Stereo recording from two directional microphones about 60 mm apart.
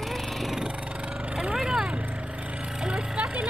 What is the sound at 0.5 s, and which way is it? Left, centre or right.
Vehicle, centre.